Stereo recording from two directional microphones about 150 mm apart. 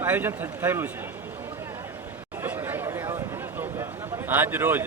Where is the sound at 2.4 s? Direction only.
15° right (ahead or behind).